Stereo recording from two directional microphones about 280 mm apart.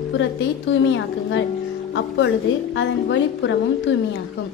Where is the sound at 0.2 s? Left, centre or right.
Left.